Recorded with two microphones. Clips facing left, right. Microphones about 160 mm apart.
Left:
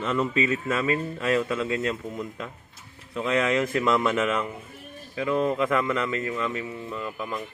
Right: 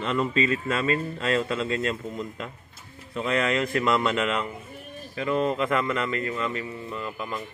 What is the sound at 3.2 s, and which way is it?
Speech, 15° left (ahead or behind).